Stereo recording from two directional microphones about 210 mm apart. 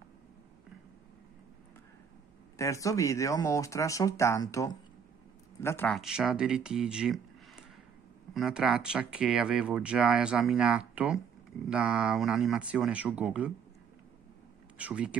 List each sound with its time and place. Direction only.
2.5 s speech: 15° left (ahead or behind)
5.9 s speech: centre (ahead or behind)
14.8 s speech: 5° right (ahead or behind)